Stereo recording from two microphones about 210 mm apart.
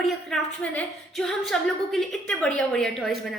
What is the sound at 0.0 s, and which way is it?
A woman's voice, centre (ahead or behind).